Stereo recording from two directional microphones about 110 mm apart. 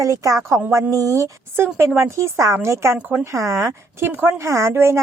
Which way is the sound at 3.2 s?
25° right (ahead or behind).